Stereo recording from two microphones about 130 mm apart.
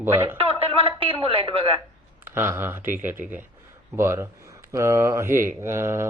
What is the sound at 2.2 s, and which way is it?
Speech, 15° right (ahead or behind).